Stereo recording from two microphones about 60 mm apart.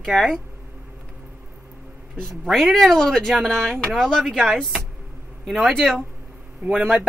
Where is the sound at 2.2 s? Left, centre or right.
Centre.